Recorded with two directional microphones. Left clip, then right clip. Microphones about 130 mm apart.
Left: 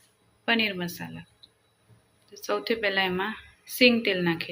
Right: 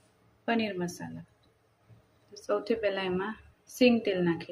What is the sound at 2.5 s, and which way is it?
A woman's voice, 5° right (ahead or behind).